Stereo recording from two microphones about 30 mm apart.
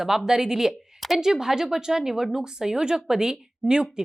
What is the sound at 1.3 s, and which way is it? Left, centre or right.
Speech, centre.